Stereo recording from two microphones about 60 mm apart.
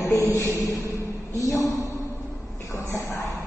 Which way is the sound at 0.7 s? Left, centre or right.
Left.